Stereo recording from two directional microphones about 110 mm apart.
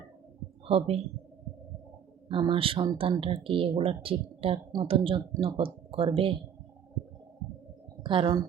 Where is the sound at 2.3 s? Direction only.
50° right (ahead or behind).